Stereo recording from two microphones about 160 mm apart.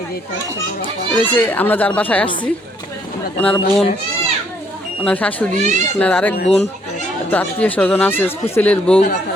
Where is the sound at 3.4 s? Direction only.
5° left (ahead or behind).